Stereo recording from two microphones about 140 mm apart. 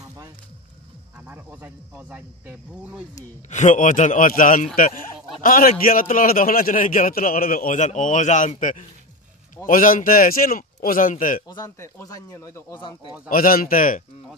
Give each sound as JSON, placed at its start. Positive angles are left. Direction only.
{"t": 1.2, "sound": "speech", "side_deg": -15}
{"t": 3.4, "sound": "a man's voice", "side_deg": 60}
{"t": 11.4, "sound": "speech", "side_deg": 25}
{"t": 13.3, "sound": "a man's voice", "side_deg": 90}